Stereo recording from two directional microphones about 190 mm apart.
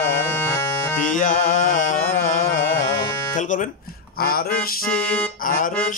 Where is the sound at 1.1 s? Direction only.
45° left (ahead or behind).